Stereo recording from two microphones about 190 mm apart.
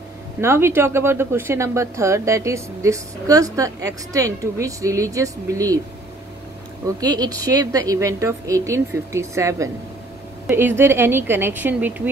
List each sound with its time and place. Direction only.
0.4 s speech: 15° right (ahead or behind)
7.0 s speech: 20° right (ahead or behind)